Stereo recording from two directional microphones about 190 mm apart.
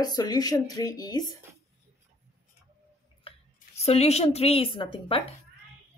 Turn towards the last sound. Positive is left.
turn(degrees=30)  # may be behind; listen again after turning